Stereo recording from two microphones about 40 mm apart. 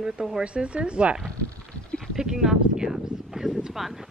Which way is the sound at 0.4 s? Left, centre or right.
Right.